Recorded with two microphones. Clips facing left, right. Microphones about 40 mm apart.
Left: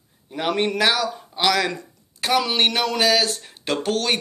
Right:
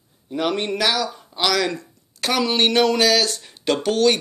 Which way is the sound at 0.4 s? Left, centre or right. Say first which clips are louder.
Left 1 dB; left.